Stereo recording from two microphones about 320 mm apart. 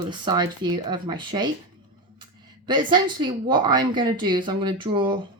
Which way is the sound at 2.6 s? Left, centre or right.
Centre.